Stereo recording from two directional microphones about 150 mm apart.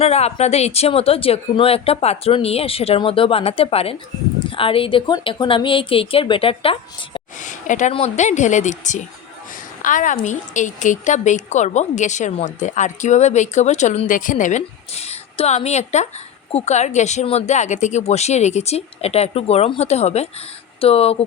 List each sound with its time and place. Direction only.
0.0 s speech: 45° left (ahead or behind)
7.4 s a sound: 55° left (ahead or behind)
7.9 s a woman's voice: 50° left (ahead or behind)
14.1 s a woman's voice: 60° left (ahead or behind); by 21.2 s 40° left (ahead or behind)